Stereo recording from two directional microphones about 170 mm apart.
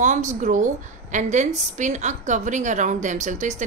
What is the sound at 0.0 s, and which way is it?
A woman's voice, 45° right (ahead or behind).